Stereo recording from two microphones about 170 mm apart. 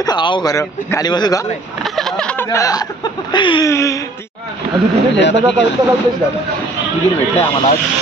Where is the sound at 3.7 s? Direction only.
15° left (ahead or behind).